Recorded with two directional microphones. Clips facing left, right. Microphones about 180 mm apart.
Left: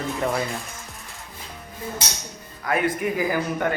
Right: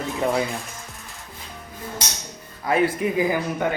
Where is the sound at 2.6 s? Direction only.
30° right (ahead or behind).